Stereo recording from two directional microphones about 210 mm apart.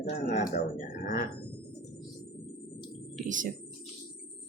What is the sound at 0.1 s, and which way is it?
Speech, 35° left (ahead or behind).